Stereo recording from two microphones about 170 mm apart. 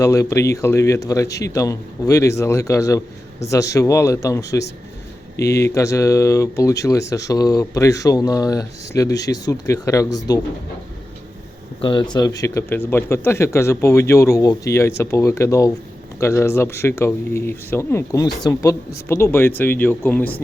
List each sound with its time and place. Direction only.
0.0 s speech: 20° left (ahead or behind)
11.8 s speech: 25° left (ahead or behind); by 20.3 s 10° left (ahead or behind)